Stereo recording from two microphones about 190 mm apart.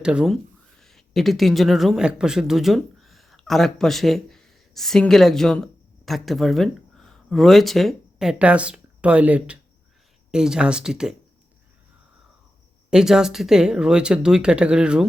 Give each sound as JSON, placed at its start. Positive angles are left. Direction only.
{"t": 0.0, "sound": "speech", "side_deg": -5}
{"t": 12.9, "sound": "speech", "side_deg": -5}